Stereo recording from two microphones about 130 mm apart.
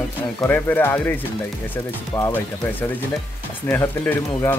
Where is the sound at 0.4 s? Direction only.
15° left (ahead or behind).